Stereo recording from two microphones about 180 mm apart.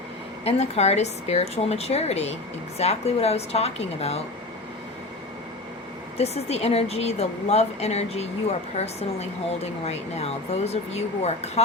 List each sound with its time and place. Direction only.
0.4 s speech: 35° left (ahead or behind)
6.1 s speech: 35° left (ahead or behind)